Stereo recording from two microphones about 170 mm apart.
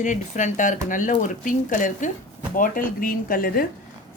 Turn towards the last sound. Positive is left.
turn(degrees=55)  # may be behind; listen again after turning